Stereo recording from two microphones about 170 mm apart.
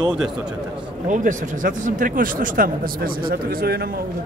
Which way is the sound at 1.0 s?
50° right (ahead or behind).